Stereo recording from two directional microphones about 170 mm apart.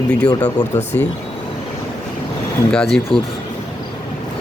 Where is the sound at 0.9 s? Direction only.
15° left (ahead or behind).